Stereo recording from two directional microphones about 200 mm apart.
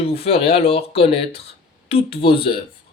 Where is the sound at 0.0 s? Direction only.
30° left (ahead or behind).